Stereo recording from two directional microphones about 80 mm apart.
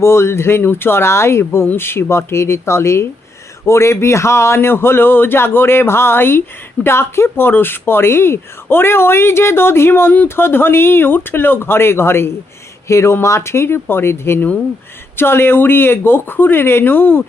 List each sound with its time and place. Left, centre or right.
0.0 s speech: left